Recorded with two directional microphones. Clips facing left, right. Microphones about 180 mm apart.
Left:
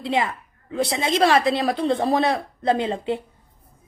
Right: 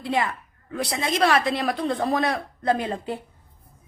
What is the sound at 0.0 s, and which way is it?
A woman's voice, 25° left (ahead or behind).